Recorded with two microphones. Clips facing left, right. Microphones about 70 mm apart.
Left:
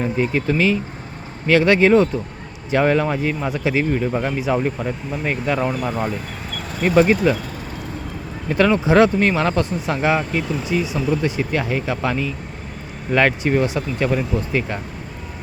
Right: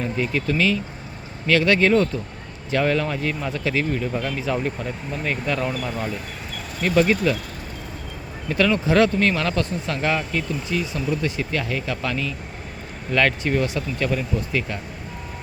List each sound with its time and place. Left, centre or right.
0.0 s speech: left
4.4 s speech: centre
8.4 s speech: left